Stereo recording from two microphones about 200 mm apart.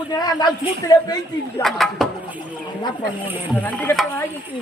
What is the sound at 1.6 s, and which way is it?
Speech, centre (ahead or behind).